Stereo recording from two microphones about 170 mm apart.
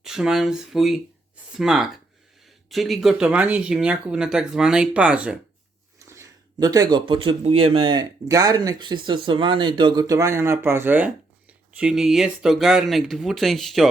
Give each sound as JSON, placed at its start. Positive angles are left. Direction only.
{"t": 0.0, "sound": "speech", "side_deg": -5}
{"t": 6.1, "sound": "speech", "side_deg": -20}